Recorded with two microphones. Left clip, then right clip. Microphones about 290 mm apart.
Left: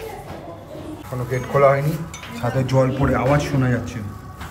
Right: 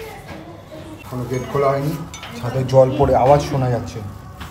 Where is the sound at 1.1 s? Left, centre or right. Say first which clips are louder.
Left 1 dB; centre.